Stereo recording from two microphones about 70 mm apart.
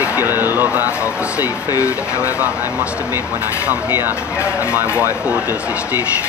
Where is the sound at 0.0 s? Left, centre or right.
Right.